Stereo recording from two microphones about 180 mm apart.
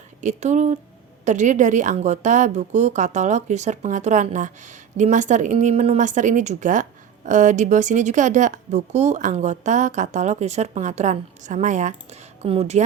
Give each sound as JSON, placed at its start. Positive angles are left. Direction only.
{"t": 0.2, "sound": "a woman's voice", "side_deg": -40}